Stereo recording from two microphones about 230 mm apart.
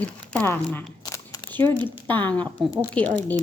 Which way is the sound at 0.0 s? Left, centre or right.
Centre.